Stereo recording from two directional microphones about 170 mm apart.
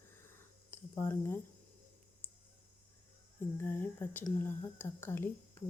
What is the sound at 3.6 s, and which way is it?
Speech, 10° left (ahead or behind).